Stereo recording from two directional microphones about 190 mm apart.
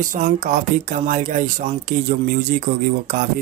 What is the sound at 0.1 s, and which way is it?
Speech, 45° right (ahead or behind).